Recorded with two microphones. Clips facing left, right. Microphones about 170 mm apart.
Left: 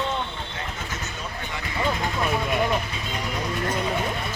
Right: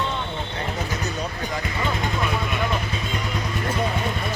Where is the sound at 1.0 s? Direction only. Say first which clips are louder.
Right 6 dB; 40° right (ahead or behind).